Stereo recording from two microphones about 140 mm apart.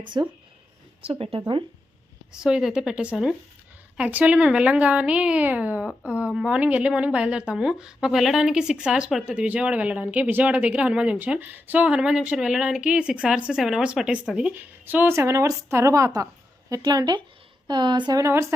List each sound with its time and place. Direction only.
0.0 s speech: 35° right (ahead or behind)
2.3 s a woman's voice: 5° right (ahead or behind); by 18.4 s 20° right (ahead or behind)